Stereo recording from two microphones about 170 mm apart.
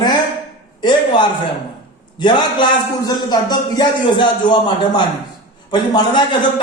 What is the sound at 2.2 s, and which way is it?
A man's voice, 25° left (ahead or behind).